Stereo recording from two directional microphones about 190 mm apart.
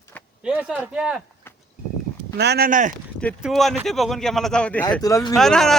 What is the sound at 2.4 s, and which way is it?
Speech, 60° right (ahead or behind).